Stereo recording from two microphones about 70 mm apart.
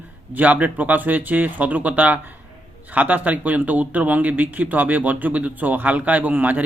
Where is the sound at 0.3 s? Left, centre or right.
Right.